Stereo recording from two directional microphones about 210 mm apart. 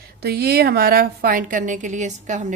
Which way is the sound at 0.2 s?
50° right (ahead or behind).